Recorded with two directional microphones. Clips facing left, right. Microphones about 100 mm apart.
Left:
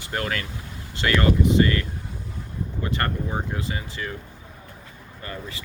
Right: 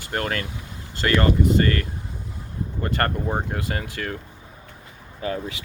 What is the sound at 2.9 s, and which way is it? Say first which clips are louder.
Speech: right 4 dB; 45° right (ahead or behind).